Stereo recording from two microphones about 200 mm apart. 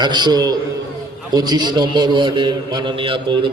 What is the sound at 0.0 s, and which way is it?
A man's voice, 20° right (ahead or behind).